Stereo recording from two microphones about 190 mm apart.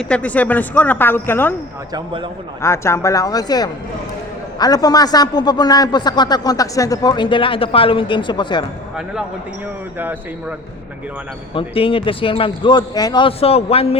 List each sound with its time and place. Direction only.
0.0 s speech: 5° left (ahead or behind)
1.9 s speech: 25° right (ahead or behind)
2.6 s a man's voice: 15° left (ahead or behind)
11.5 s a man's voice: 30° left (ahead or behind)